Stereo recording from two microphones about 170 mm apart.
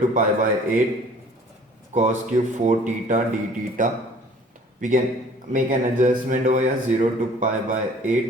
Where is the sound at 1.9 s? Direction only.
45° right (ahead or behind).